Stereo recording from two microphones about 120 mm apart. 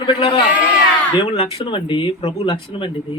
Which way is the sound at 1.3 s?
50° left (ahead or behind).